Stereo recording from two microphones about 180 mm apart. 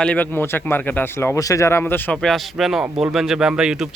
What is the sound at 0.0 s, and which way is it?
Speech, 10° left (ahead or behind).